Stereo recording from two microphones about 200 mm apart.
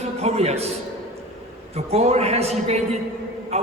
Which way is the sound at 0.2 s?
30° right (ahead or behind).